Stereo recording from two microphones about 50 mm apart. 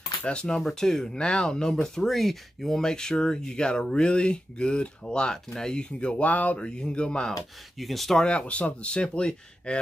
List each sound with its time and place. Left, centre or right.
0.2 s speech: centre
6.6 s speech: centre
7.7 s speech: centre
8.2 s speech: left